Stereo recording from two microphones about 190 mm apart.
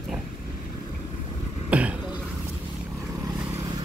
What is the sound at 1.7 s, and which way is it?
Throat clearing, 5° right (ahead or behind).